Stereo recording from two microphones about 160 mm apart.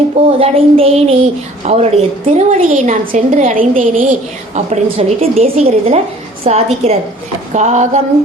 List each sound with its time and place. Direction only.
0.3 s a woman's voice: 35° right (ahead or behind)